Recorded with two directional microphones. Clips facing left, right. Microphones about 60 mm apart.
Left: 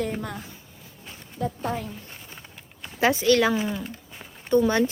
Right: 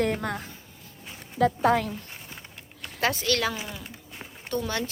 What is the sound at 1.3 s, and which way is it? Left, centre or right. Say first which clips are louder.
Speech: right 7 dB; right.